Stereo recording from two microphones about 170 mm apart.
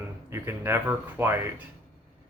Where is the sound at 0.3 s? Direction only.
15° right (ahead or behind).